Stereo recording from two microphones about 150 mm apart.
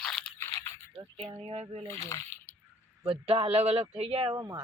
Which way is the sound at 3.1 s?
40° right (ahead or behind).